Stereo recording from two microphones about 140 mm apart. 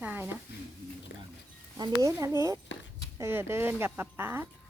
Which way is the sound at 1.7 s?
25° right (ahead or behind).